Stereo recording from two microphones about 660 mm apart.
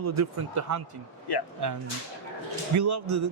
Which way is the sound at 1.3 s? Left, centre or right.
Left.